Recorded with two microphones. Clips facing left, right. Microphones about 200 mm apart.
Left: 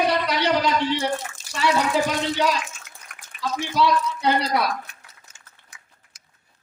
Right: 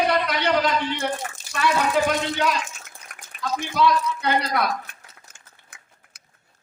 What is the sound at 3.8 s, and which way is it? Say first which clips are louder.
Speech: even; 55° right (ahead or behind).